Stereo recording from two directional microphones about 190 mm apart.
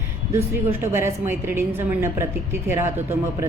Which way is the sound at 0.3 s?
15° right (ahead or behind).